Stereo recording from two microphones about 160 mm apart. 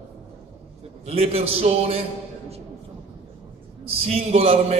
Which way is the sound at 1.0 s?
40° right (ahead or behind).